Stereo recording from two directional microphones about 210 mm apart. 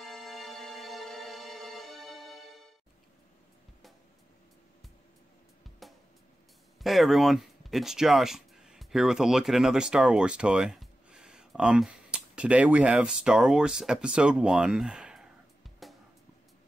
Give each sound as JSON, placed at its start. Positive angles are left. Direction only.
{"t": 0.0, "sound": "music", "side_deg": 0}
{"t": 5.8, "sound": "music", "side_deg": 0}
{"t": 6.8, "sound": "speech", "side_deg": 0}
{"t": 15.8, "sound": "music", "side_deg": 0}